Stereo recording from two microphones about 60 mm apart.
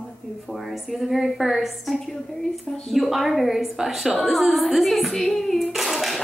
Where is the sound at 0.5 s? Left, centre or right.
Centre.